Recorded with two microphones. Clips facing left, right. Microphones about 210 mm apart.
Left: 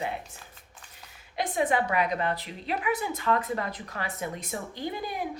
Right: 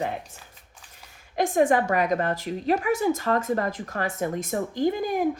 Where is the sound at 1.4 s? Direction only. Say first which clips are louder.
Right 6 dB; 45° right (ahead or behind).